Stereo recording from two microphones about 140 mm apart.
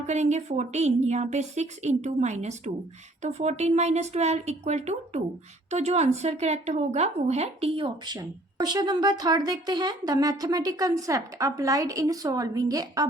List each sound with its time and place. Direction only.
0.1 s a woman's voice: 55° right (ahead or behind); by 13.1 s 25° right (ahead or behind)